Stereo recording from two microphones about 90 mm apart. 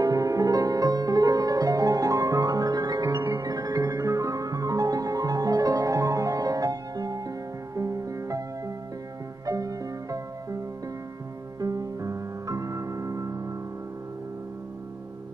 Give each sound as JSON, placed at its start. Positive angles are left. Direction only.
{"t": 0.0, "sound": "music", "side_deg": -40}
{"t": 11.6, "sound": "music", "side_deg": -40}